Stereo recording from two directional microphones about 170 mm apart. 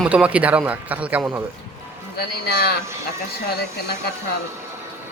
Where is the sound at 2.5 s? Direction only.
65° left (ahead or behind).